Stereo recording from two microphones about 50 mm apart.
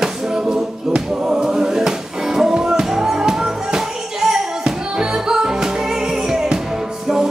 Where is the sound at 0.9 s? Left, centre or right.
Centre.